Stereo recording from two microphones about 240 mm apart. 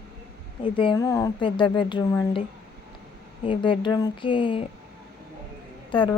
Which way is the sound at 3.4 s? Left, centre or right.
Left.